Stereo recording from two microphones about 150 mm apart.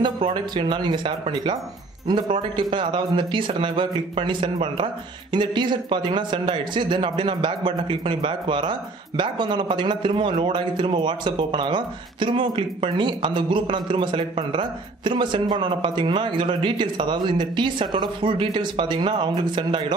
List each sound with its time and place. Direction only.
0.0 s speech: 35° right (ahead or behind)